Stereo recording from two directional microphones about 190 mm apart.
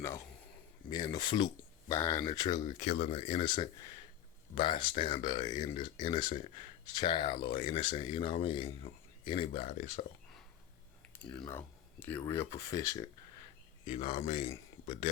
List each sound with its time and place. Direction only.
0.9 s speech: 20° left (ahead or behind); by 10.0 s 40° left (ahead or behind)
11.4 s speech: 10° left (ahead or behind)
13.8 s speech: 30° left (ahead or behind)